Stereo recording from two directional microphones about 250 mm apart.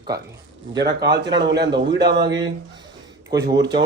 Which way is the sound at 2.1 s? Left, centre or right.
Right.